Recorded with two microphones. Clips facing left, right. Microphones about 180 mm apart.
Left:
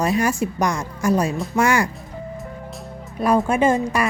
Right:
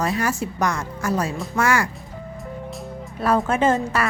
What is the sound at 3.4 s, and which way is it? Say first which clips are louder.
Speech: left 2 dB; 10° left (ahead or behind).